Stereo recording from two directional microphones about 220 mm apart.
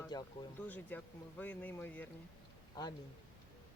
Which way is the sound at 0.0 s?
20° left (ahead or behind).